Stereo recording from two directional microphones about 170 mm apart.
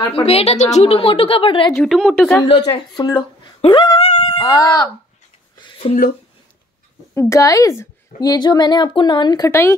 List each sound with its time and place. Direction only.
0.1 s a woman's voice: 35° left (ahead or behind)
1.8 s speech: centre (ahead or behind)
2.4 s speech: 30° left (ahead or behind)
4.1 s honk: 35° left (ahead or behind)
4.5 s a woman's voice: 20° left (ahead or behind)
5.6 s a sound: 30° left (ahead or behind)
7.2 s a woman's voice: 20° left (ahead or behind)